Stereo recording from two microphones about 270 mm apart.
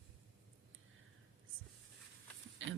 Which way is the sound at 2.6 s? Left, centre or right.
Right.